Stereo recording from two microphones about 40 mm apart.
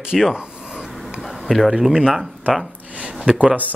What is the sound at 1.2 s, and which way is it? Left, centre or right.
Speech, centre.